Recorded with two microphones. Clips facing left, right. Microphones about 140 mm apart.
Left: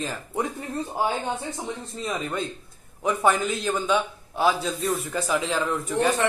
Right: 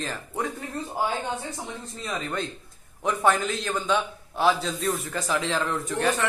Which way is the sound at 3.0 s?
5° left (ahead or behind).